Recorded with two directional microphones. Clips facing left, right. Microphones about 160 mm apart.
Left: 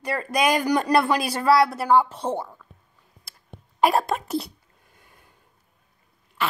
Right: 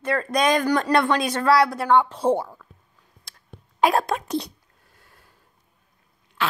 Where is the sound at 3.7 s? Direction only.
Centre (ahead or behind).